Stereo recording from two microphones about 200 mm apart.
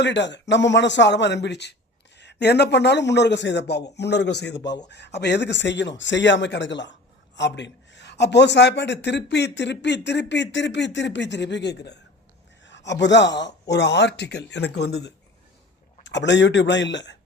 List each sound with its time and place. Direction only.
0.0 s a man's voice: 60° left (ahead or behind)